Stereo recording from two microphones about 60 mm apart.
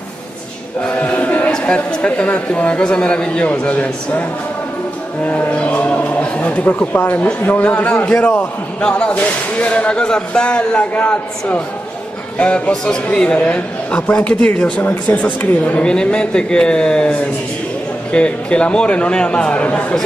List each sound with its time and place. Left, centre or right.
0.8 s chant: left
1.6 s a man's voice: centre
5.2 s a man's voice: left